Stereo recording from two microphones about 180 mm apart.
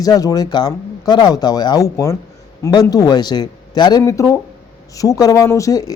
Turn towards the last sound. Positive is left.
turn(degrees=20)  # may be behind; listen again after turning